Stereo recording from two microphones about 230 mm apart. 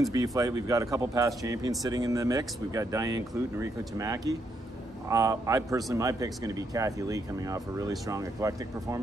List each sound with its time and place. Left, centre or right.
0.1 s speech: centre